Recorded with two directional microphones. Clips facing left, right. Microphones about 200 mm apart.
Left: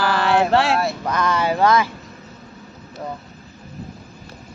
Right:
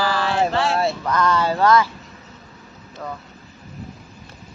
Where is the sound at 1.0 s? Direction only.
15° left (ahead or behind).